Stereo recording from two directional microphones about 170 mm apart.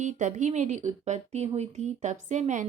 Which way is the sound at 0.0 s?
45° right (ahead or behind).